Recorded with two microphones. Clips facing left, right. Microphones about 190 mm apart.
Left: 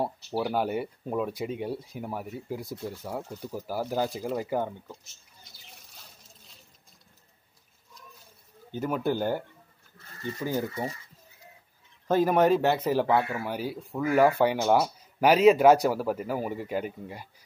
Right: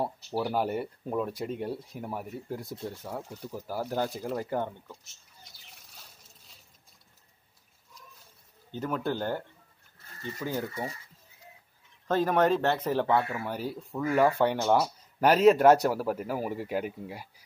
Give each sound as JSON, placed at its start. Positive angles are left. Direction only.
{"t": 0.0, "sound": "speech", "side_deg": 0}
{"t": 8.7, "sound": "speech", "side_deg": 10}
{"t": 10.4, "sound": "speech", "side_deg": 15}
{"t": 12.1, "sound": "speech", "side_deg": 10}